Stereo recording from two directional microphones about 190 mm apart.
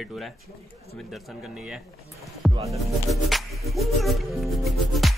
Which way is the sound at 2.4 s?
Centre (ahead or behind).